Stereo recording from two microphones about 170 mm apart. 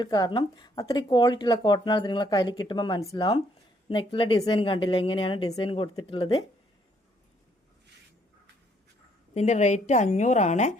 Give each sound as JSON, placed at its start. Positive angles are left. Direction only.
{"t": 0.0, "sound": "speech", "side_deg": 25}
{"t": 9.3, "sound": "a woman's voice", "side_deg": 45}